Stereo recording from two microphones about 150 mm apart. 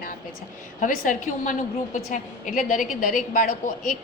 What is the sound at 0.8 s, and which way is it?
Speech, 65° left (ahead or behind).